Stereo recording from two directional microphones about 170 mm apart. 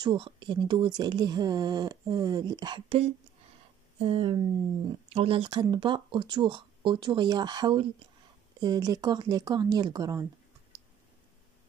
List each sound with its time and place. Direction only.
0.0 s speech: 30° right (ahead or behind)